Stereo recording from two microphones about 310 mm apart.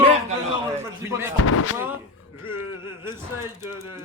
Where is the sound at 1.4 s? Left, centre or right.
Left.